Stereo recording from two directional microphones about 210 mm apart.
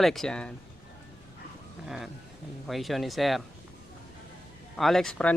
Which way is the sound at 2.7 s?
Centre (ahead or behind).